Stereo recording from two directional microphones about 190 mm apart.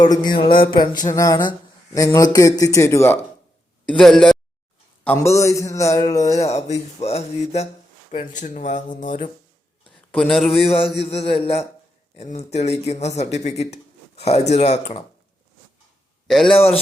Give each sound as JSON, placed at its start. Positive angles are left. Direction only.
{"t": 0.0, "sound": "a sound", "side_deg": 20}
{"t": 3.8, "sound": "speech", "side_deg": 5}
{"t": 5.0, "sound": "a sound", "side_deg": 15}
{"t": 6.4, "sound": "speech", "side_deg": 35}
{"t": 10.1, "sound": "speech", "side_deg": 0}
{"t": 10.5, "sound": "speech", "side_deg": 30}
{"t": 16.2, "sound": "a man's voice", "side_deg": 0}